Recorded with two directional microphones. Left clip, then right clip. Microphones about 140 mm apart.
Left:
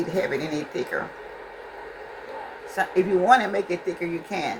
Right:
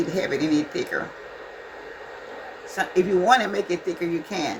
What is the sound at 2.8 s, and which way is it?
Speech, 15° right (ahead or behind).